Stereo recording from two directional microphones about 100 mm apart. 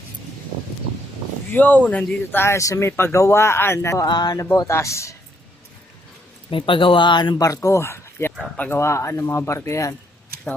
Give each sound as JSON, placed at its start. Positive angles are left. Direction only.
{"t": 1.5, "sound": "speech", "side_deg": 15}
{"t": 4.0, "sound": "speech", "side_deg": 45}
{"t": 6.5, "sound": "speech", "side_deg": 60}
{"t": 7.3, "sound": "speech", "side_deg": 35}
{"t": 8.5, "sound": "speech", "side_deg": 15}
{"t": 8.8, "sound": "speech", "side_deg": 30}